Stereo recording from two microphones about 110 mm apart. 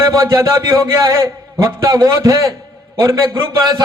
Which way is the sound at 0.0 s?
30° right (ahead or behind).